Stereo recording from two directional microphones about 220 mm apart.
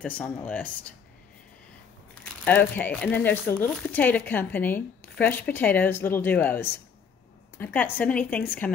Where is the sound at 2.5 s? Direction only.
10° left (ahead or behind).